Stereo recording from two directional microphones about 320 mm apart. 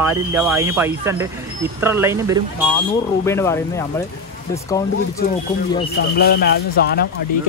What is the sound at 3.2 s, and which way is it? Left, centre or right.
A man's voice, centre.